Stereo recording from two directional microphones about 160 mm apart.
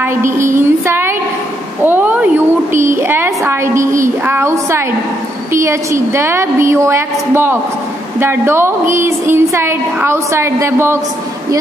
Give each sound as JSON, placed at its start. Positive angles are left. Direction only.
{"t": 0.0, "sound": "a woman's voice", "side_deg": -15}